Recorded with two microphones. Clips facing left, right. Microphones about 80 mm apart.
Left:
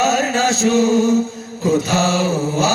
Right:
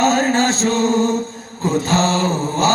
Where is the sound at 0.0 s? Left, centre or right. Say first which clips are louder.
Right 1 dB; right.